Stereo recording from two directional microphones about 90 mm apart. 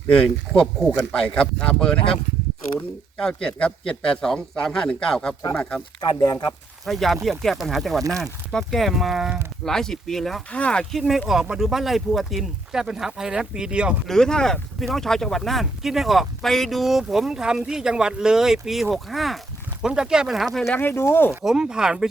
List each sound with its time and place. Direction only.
0.1 s a man's voice: 10° left (ahead or behind)
3.2 s a man's voice: 10° left (ahead or behind)
6.0 s speech: 50° left (ahead or behind)
6.8 s a man's voice: centre (ahead or behind)
11.3 s speech: 5° right (ahead or behind)
14.1 s speech: 10° left (ahead or behind)
20.7 s speech: 25° left (ahead or behind)
21.4 s speech: 5° right (ahead or behind)